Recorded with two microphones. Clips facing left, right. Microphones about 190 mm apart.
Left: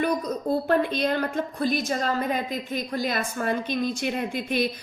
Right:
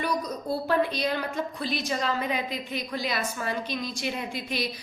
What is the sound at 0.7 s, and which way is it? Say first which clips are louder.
A woman's voice: left 1 dB; 55° left (ahead or behind).